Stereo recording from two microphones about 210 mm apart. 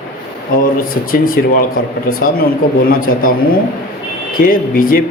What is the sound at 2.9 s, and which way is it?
Speech, 40° left (ahead or behind).